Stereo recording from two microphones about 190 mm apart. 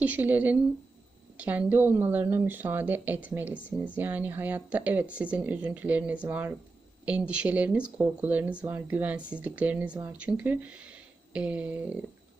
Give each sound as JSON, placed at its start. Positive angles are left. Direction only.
{"t": 0.0, "sound": "speech", "side_deg": -10}